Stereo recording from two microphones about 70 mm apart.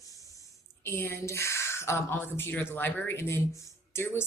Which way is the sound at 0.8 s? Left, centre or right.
Left.